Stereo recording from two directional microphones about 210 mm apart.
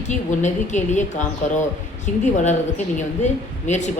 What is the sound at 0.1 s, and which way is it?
A woman's voice, 35° left (ahead or behind).